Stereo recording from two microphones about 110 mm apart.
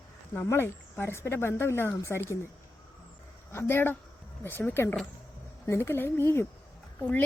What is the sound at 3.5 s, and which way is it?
A woman's voice, 20° left (ahead or behind).